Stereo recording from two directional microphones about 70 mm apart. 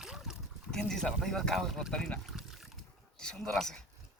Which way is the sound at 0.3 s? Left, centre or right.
Centre.